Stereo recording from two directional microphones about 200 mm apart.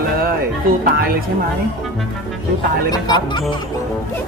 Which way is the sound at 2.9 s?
20° left (ahead or behind).